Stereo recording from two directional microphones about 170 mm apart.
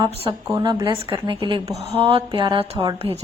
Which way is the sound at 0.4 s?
20° right (ahead or behind).